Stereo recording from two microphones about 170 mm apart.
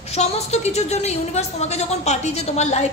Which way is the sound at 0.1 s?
40° left (ahead or behind).